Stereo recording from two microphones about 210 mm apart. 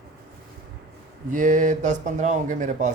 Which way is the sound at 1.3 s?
35° right (ahead or behind).